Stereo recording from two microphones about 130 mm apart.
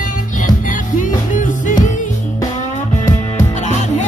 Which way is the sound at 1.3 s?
85° left.